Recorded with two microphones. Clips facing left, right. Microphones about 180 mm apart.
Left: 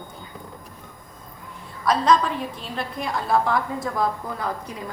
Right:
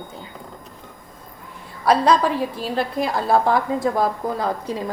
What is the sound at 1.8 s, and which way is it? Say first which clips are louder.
A woman's voice: right 3 dB; 35° right (ahead or behind).